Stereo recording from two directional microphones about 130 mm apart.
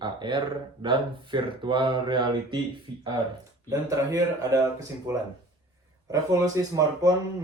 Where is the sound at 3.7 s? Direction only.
25° right (ahead or behind).